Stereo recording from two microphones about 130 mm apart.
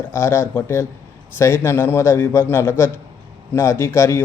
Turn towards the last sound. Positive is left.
turn(degrees=20)  # may be behind; listen again after turning